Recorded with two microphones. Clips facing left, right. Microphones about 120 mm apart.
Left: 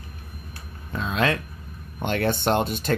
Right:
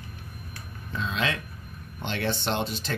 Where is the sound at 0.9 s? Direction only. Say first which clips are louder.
Left 5 dB; 50° left (ahead or behind).